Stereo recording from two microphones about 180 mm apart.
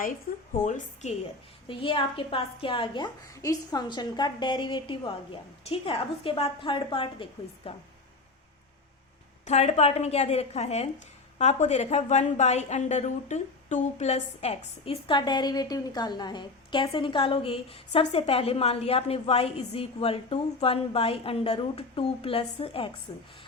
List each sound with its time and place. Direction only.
0.5 s a woman's voice: 45° left (ahead or behind)
1.6 s a woman's voice: 30° left (ahead or behind)
9.5 s a woman's voice: 40° left (ahead or behind)